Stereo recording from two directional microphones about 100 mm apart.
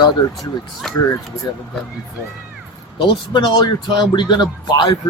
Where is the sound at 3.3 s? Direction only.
45° left (ahead or behind).